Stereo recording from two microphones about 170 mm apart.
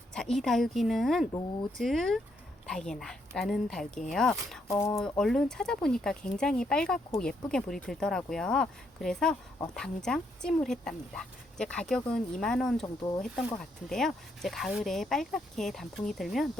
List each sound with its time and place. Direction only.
0.1 s speech: 5° left (ahead or behind)
4.7 s speech: 20° left (ahead or behind)
4.9 s speech: 5° left (ahead or behind)
12.8 s speech: 25° left (ahead or behind)
13.6 s speech: 5° left (ahead or behind)